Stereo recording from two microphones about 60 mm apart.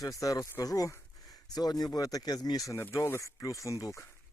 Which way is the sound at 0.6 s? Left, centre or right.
Left.